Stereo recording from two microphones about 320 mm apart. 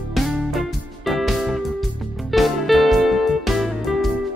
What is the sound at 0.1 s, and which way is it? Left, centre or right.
Music, centre.